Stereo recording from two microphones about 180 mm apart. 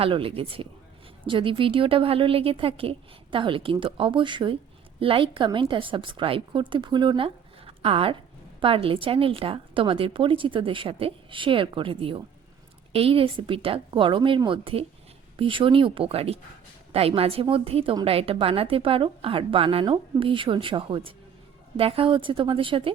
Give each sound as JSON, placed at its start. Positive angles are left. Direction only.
{"t": 0.0, "sound": "a woman's voice", "side_deg": -30}